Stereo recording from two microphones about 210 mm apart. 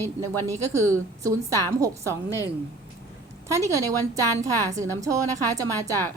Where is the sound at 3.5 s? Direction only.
15° right (ahead or behind).